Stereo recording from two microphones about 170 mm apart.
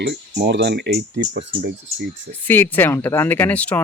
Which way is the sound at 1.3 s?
90° right.